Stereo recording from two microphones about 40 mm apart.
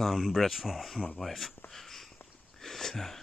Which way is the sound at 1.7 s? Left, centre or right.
Centre.